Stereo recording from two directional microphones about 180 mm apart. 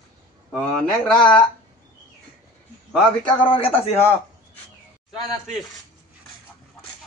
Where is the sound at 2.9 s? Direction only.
5° left (ahead or behind).